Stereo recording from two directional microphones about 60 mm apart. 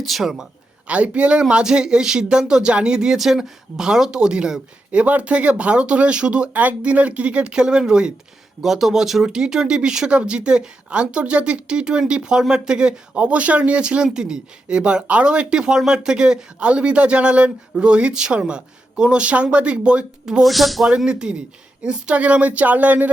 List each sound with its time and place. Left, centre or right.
0.0 s speech: centre
0.9 s speech: right
20.4 s speech: centre
20.9 s speech: centre